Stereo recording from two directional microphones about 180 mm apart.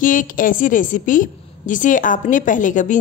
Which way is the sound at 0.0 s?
50° left (ahead or behind).